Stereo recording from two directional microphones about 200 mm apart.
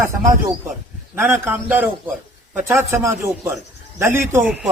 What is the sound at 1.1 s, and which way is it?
A man's voice, 10° right (ahead or behind).